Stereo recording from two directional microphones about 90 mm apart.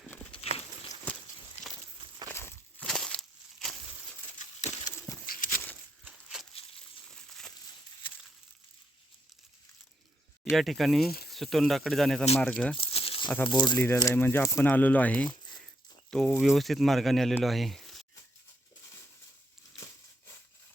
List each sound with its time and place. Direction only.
0.3 s a sound: 90° left
1.1 s walk: 15° left (ahead or behind)
2.3 s walk: 25° left (ahead or behind)
2.8 s a sound: 5° left (ahead or behind)
5.1 s a sound: 25° left (ahead or behind)
6.1 s a sound: 10° right (ahead or behind)
7.2 s crushing: 5° left (ahead or behind)
10.5 s speech: centre (ahead or behind)
12.7 s crumpling: 90° left
13.5 s speech: 55° left (ahead or behind)
13.7 s speech: 25° left (ahead or behind)
16.0 s speech: 5° left (ahead or behind)